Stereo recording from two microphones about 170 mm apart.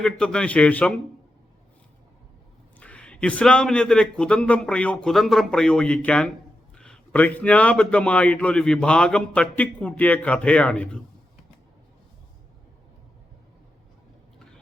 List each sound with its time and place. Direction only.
0.0 s a man's voice: 5° left (ahead or behind)
2.7 s a man's voice: 5° left (ahead or behind)